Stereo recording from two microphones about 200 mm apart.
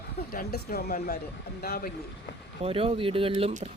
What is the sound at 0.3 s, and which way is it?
Speech, 50° left (ahead or behind).